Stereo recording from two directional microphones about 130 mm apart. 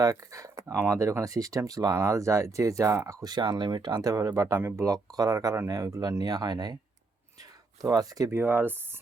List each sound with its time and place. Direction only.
0.0 s speech: 25° right (ahead or behind)
7.8 s speech: 25° right (ahead or behind)
8.4 s speech: 15° right (ahead or behind)